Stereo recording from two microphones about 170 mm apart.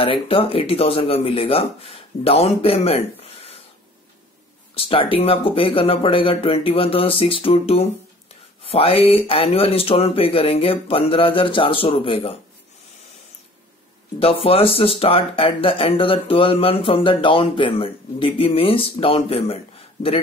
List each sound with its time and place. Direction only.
0.0 s speech: 35° left (ahead or behind)
4.7 s speech: 35° left (ahead or behind)
14.2 s speech: 35° left (ahead or behind)